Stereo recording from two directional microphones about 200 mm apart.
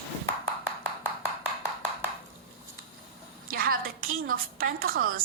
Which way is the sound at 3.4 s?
50° right (ahead or behind).